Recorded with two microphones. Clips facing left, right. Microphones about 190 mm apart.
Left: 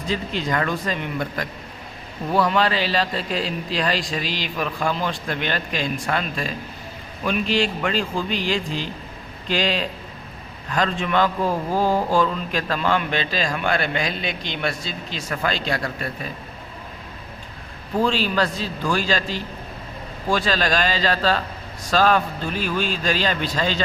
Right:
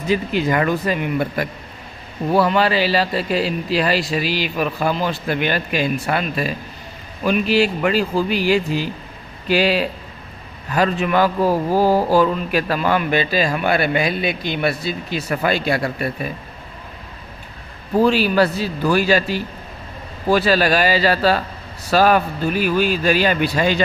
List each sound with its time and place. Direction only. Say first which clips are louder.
0.1 s a man's voice: right 6 dB; 5° right (ahead or behind)
11.4 s speech: right 5 dB; 35° right (ahead or behind)
12.1 s a man's voice: right 5 dB; 10° right (ahead or behind)
18.0 s a man's voice: right 6 dB; 5° right (ahead or behind)